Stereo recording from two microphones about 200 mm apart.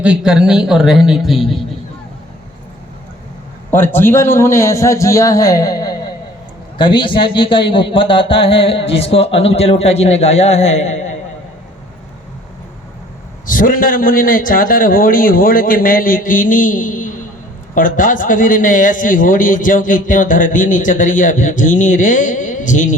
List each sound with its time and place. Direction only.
0.0 s a man's voice: 5° right (ahead or behind)
3.7 s a man's voice: 10° left (ahead or behind); by 11.2 s 35° left (ahead or behind)
13.5 s a man's voice: 45° left (ahead or behind)